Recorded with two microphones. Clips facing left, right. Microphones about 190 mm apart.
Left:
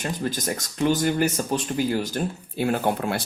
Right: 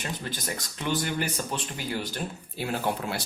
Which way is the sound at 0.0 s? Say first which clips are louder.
Left 7 dB; 45° left (ahead or behind).